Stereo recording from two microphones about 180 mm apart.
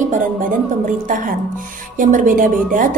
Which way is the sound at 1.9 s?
45° right (ahead or behind).